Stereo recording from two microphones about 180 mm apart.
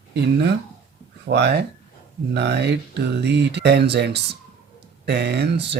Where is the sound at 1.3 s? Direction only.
70° right (ahead or behind).